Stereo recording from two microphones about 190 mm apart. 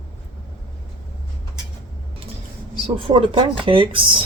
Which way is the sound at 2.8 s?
25° right (ahead or behind).